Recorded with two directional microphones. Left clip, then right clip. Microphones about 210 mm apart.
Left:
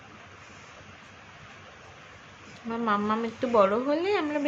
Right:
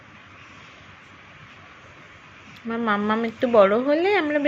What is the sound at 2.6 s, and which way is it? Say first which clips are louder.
Speech: right 4 dB; 20° right (ahead or behind).